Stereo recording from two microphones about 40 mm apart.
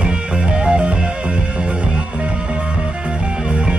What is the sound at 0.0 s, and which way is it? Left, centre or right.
Music, right.